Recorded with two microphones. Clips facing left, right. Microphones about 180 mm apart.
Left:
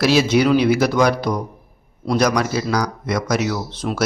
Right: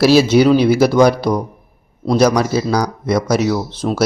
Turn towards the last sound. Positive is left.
turn(degrees=-35)  # may be behind; listen again after turning